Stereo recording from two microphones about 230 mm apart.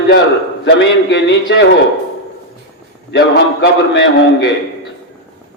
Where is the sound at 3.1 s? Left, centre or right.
Left.